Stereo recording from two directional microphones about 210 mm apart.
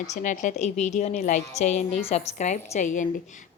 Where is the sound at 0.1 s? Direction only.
35° left (ahead or behind).